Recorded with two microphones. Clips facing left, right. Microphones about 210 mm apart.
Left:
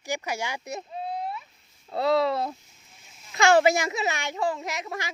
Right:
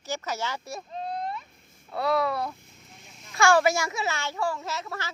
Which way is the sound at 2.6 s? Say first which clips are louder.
Right 7 dB; 55° right (ahead or behind).